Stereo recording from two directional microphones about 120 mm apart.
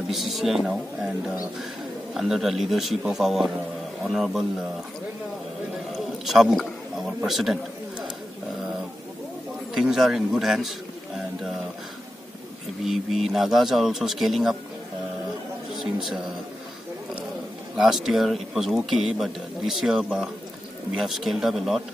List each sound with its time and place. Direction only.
0.1 s speech: centre (ahead or behind)
5.9 s speech: centre (ahead or behind)
9.8 s speech: centre (ahead or behind)
12.8 s speech: centre (ahead or behind)
15.7 s speech: centre (ahead or behind)
17.7 s speech: 5° right (ahead or behind)